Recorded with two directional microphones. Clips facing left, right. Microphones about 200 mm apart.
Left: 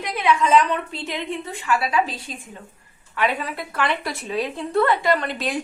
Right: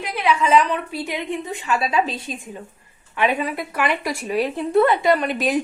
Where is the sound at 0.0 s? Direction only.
10° right (ahead or behind).